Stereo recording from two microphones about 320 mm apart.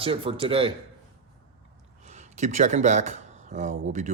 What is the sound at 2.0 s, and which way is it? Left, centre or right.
Speech, right.